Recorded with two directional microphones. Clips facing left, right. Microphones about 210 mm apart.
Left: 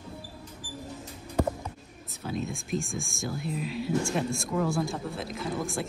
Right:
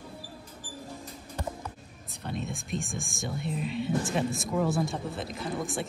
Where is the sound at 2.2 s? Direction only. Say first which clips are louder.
Left 2 dB; centre (ahead or behind).